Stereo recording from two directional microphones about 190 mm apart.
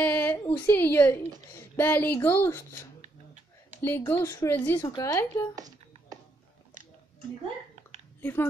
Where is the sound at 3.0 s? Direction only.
40° right (ahead or behind).